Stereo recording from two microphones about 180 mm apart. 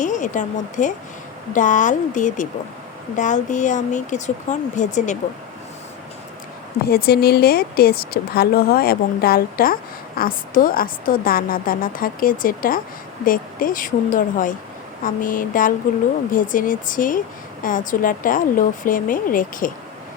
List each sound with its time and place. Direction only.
0.0 s a woman's voice: 45° left (ahead or behind)
6.8 s a woman's voice: 60° left (ahead or behind)